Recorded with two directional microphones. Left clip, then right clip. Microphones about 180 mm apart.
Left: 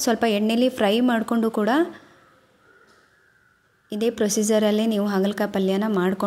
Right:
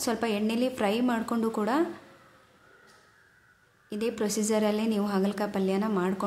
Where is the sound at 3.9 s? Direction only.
30° left (ahead or behind).